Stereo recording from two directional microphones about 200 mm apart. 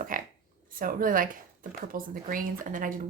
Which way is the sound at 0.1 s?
45° right (ahead or behind).